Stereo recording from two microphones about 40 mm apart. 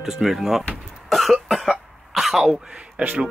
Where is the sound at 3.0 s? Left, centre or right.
Right.